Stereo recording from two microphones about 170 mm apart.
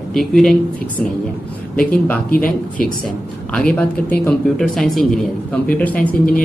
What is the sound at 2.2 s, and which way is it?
Speech, 60° left (ahead or behind).